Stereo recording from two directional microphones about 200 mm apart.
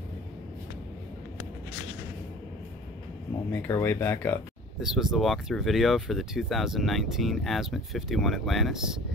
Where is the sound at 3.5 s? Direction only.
10° left (ahead or behind).